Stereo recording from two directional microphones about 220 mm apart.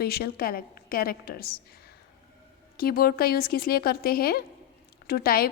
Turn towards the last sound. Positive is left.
turn(degrees=45)  # may be behind; listen again after turning